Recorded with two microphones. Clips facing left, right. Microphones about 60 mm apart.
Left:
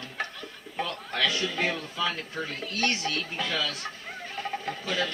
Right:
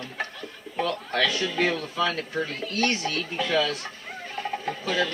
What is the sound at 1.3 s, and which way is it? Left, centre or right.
Speech, centre.